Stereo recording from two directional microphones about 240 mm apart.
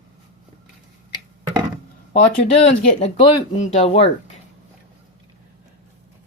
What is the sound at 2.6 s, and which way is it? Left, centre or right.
Speech, left.